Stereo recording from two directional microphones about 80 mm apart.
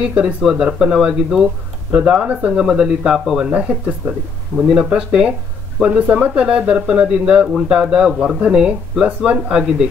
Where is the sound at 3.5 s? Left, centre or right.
Centre.